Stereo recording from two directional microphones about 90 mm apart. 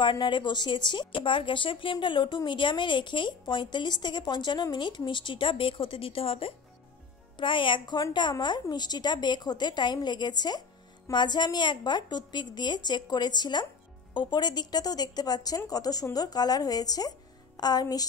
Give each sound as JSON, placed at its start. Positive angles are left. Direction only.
{"t": 0.0, "sound": "a woman's voice", "side_deg": 60}
{"t": 7.3, "sound": "a woman's voice", "side_deg": 65}